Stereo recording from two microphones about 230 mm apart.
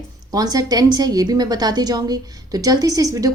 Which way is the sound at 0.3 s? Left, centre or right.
Centre.